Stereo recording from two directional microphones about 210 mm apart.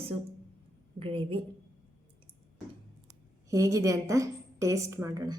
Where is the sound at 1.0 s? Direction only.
25° right (ahead or behind).